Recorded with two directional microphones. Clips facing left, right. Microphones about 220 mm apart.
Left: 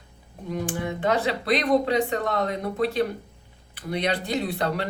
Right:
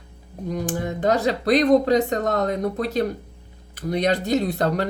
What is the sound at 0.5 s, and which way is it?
Speech, 40° right (ahead or behind).